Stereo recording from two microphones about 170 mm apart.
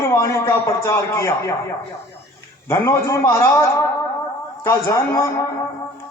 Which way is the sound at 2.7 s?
15° left (ahead or behind).